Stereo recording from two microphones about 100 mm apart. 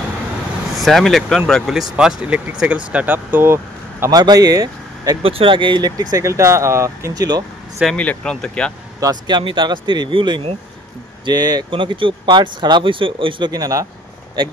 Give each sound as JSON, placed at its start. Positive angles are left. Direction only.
{"t": 0.7, "sound": "speech", "side_deg": 0}
{"t": 4.1, "sound": "speech", "side_deg": -40}
{"t": 5.2, "sound": "speech", "side_deg": -65}
{"t": 7.8, "sound": "speech", "side_deg": 10}
{"t": 9.0, "sound": "speech", "side_deg": -45}
{"t": 11.7, "sound": "speech", "side_deg": -55}
{"t": 13.5, "sound": "speech", "side_deg": -35}